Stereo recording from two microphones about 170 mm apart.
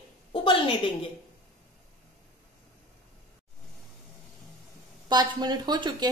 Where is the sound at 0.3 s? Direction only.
30° left (ahead or behind).